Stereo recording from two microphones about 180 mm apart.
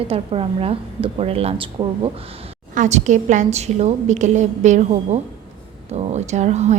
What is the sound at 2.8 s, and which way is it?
A woman's voice, 40° right (ahead or behind).